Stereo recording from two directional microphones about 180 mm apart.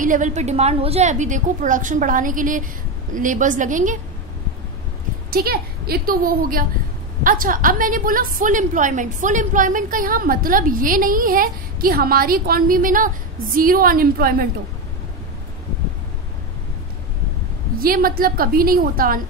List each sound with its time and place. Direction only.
0.0 s a woman's voice: 45° right (ahead or behind)
5.3 s a woman's voice: 55° right (ahead or behind)
17.7 s a woman's voice: 55° right (ahead or behind)